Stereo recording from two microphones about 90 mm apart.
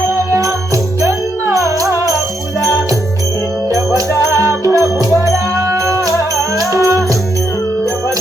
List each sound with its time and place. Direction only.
0.1 s music: 35° right (ahead or behind)
3.7 s music: 35° right (ahead or behind)